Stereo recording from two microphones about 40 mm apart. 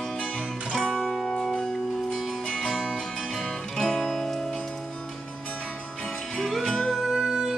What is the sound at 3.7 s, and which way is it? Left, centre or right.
Music, centre.